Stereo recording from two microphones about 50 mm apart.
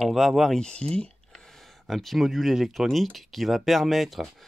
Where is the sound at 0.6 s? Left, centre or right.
Left.